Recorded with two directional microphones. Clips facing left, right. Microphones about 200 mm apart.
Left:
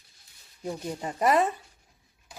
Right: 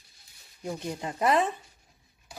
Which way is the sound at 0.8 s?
10° left (ahead or behind).